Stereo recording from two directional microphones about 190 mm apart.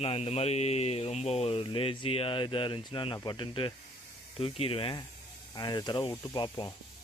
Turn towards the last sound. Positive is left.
turn(degrees=20)  # may be behind; listen again after turning